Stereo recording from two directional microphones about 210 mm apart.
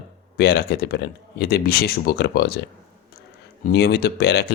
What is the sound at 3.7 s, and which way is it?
Speech, 50° left (ahead or behind).